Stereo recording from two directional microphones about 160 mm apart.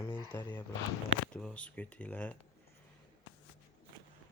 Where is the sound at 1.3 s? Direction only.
5° left (ahead or behind).